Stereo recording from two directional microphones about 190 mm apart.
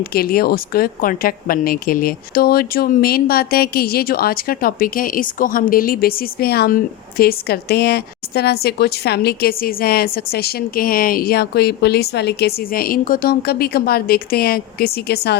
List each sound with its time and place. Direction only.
0.0 s a woman's voice: 55° left (ahead or behind)